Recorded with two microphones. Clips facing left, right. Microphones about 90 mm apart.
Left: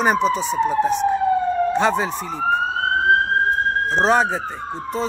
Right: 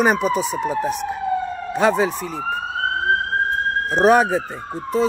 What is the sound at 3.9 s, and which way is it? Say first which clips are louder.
Speech: right 4 dB; 10° right (ahead or behind).